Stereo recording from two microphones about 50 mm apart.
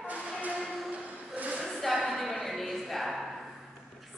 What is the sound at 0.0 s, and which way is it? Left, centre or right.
Music, right.